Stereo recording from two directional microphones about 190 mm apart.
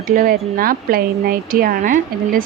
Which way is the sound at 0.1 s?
50° right (ahead or behind).